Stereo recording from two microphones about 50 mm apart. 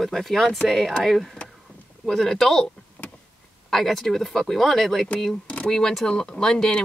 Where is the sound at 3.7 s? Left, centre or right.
Centre.